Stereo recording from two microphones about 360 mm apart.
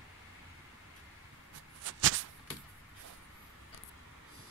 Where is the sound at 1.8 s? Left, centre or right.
Right.